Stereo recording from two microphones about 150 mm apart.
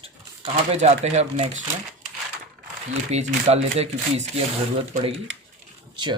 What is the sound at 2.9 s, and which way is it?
Speech, 45° right (ahead or behind).